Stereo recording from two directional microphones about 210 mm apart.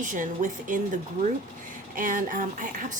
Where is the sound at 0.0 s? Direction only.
40° right (ahead or behind).